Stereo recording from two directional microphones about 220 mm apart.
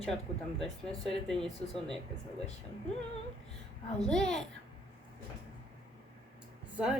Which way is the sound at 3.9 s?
5° left (ahead or behind).